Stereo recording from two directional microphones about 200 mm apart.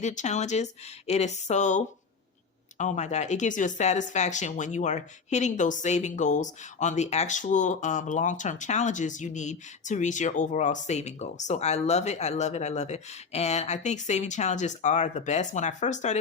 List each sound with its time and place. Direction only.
0.0 s speech: 35° left (ahead or behind)